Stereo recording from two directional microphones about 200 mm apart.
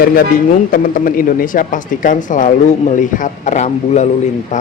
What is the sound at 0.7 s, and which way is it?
Speech, 45° left (ahead or behind).